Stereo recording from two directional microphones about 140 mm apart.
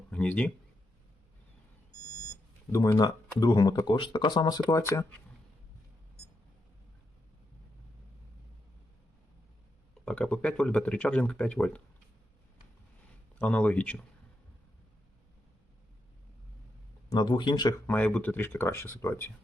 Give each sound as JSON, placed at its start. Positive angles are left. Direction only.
{"t": 0.1, "sound": "speech", "side_deg": 10}
{"t": 2.7, "sound": "speech", "side_deg": 25}
{"t": 10.1, "sound": "speech", "side_deg": 10}
{"t": 13.4, "sound": "speech", "side_deg": 10}
{"t": 17.1, "sound": "speech", "side_deg": 30}
{"t": 17.8, "sound": "speech", "side_deg": 10}